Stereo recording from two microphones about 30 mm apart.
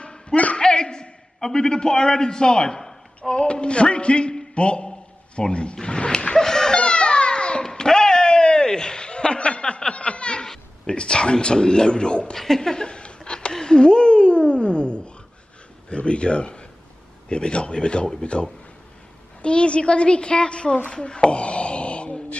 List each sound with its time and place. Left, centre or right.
0.0 s a sound: left
1.5 s speech: left
6.8 s cat: left
7.6 s chuckle: left
10.9 s speech: left
12.4 s speech: centre
12.8 s a sound: left
15.9 s speech: left
20.9 s a sound: left